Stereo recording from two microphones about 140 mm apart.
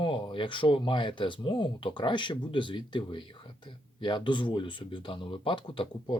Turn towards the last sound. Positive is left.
turn(degrees=35)  # may be behind; listen again after turning